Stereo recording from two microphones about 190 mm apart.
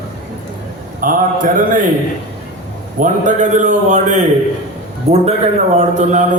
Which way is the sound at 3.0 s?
40° right (ahead or behind).